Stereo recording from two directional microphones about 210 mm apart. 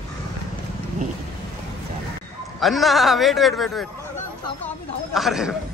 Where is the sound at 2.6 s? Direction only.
Centre (ahead or behind).